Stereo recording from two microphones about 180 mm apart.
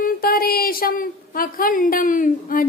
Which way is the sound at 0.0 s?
55° left (ahead or behind).